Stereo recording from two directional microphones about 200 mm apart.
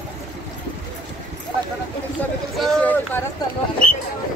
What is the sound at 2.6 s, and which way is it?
Speech, 10° left (ahead or behind).